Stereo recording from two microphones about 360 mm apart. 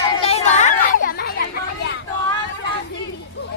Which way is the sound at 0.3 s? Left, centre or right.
Centre.